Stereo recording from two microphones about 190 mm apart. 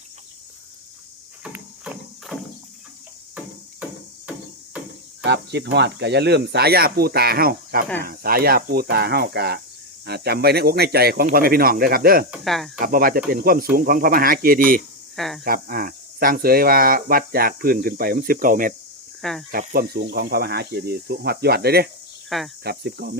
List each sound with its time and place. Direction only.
1.5 s clip-clop: 5° right (ahead or behind)
5.2 s speech: 65° right (ahead or behind)
12.3 s speech: centre (ahead or behind)
12.8 s speech: 50° right (ahead or behind)
15.1 s speech: centre (ahead or behind)
15.4 s speech: 50° right (ahead or behind)
19.2 s speech: centre (ahead or behind)
19.5 s speech: 50° right (ahead or behind)